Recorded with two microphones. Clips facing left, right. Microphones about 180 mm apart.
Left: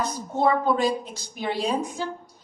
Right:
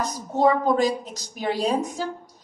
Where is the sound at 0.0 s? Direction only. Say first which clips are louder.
Right 2 dB; 40° right (ahead or behind).